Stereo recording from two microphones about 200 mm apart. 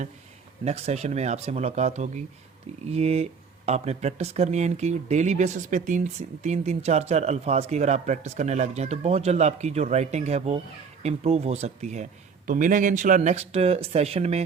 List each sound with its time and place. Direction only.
0.6 s speech: 35° right (ahead or behind)